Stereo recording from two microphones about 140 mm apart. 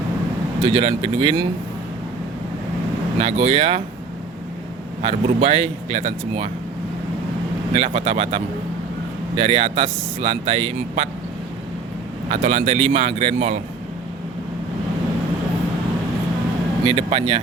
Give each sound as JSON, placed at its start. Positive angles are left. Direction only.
{"t": 0.7, "sound": "speech", "side_deg": -40}
{"t": 3.2, "sound": "speech", "side_deg": -45}
{"t": 5.0, "sound": "speech", "side_deg": -45}
{"t": 7.7, "sound": "speech", "side_deg": -45}
{"t": 12.3, "sound": "speech", "side_deg": -55}
{"t": 16.8, "sound": "speech", "side_deg": -40}